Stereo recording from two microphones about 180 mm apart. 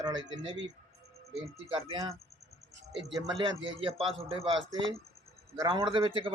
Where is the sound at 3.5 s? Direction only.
30° right (ahead or behind).